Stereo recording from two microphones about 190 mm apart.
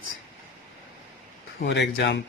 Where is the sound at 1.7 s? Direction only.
65° left (ahead or behind).